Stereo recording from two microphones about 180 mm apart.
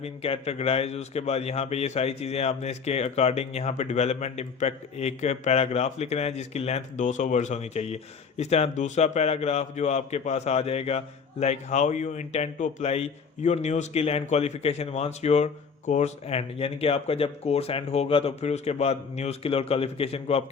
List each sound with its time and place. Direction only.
0.0 s a man's voice: 35° left (ahead or behind)